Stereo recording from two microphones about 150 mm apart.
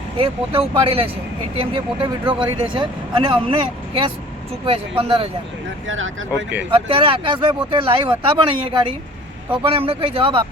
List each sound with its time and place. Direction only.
0.2 s speech: 40° right (ahead or behind)
6.7 s speech: 35° right (ahead or behind)